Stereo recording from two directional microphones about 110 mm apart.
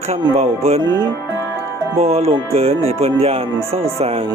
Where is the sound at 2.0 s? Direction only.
70° right (ahead or behind).